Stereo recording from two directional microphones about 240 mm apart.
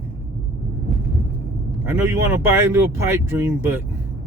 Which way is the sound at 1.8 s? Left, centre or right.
Centre.